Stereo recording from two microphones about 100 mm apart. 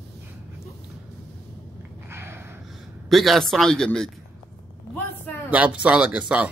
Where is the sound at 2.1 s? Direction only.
25° right (ahead or behind).